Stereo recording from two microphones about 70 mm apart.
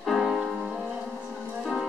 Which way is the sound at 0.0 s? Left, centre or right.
Centre.